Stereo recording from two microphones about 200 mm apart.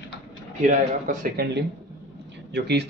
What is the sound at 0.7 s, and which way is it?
Speech, 45° right (ahead or behind).